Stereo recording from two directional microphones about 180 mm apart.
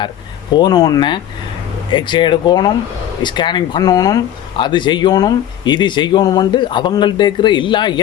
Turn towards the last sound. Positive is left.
turn(degrees=25)  # may be behind; listen again after turning